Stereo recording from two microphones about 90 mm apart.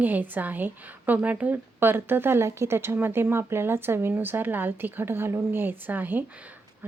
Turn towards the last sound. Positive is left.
turn(degrees=-20)  # may be behind; listen again after turning